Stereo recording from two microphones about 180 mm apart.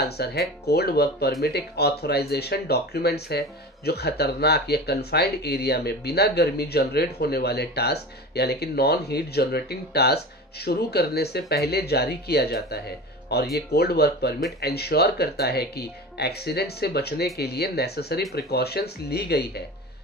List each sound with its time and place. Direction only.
0.0 s speech: 60° left (ahead or behind)